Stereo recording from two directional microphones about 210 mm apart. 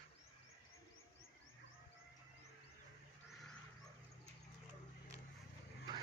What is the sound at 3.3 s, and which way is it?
Wild animals, centre (ahead or behind).